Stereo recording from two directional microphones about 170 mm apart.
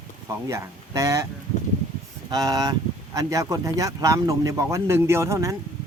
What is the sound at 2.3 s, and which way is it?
A man's voice, 20° right (ahead or behind).